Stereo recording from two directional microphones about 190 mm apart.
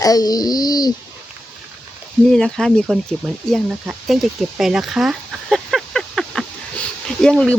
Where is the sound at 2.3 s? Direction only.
5° left (ahead or behind).